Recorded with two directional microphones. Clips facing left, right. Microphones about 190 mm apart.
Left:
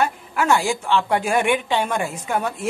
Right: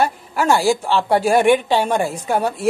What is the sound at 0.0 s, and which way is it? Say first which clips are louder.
A man's voice: right 3 dB; 35° right (ahead or behind).